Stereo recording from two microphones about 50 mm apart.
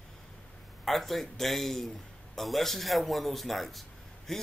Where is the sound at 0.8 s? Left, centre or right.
Centre.